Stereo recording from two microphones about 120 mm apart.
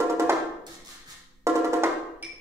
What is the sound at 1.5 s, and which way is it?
Percussion, 20° right (ahead or behind).